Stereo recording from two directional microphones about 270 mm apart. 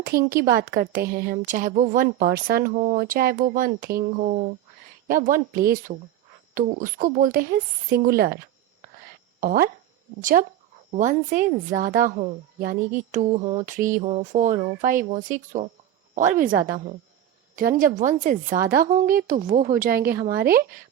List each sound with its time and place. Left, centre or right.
0.3 s a woman's voice: right
9.4 s speech: right
10.9 s a woman's voice: right
18.4 s a woman's voice: centre
18.7 s a woman's voice: right